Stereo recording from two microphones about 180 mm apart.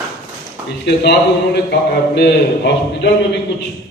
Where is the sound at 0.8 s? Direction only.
65° left (ahead or behind).